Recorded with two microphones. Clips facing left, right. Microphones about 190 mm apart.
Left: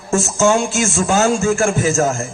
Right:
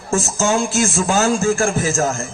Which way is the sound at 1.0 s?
35° right (ahead or behind).